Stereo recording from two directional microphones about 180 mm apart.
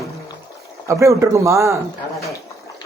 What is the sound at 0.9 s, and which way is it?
Speech, 15° right (ahead or behind).